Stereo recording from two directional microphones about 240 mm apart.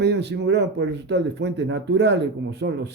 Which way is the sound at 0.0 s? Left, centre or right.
Right.